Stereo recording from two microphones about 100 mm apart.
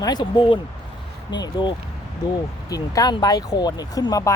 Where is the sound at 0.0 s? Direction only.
45° left (ahead or behind).